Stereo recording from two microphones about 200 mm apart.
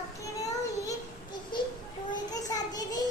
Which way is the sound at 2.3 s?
20° left (ahead or behind).